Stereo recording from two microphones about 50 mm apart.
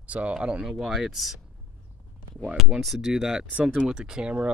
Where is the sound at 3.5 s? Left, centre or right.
Right.